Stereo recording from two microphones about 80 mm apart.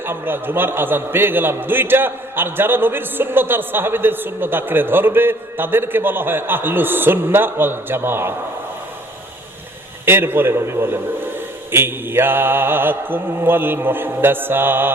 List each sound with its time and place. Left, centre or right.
0.0 s a man's voice: right
10.1 s a man's voice: right